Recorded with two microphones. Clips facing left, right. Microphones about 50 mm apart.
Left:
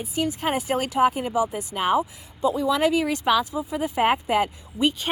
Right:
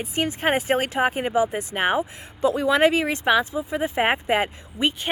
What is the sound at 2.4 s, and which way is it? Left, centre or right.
Speech, right.